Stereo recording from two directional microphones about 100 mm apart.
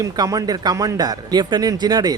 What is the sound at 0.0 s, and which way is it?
A man's voice, 35° right (ahead or behind).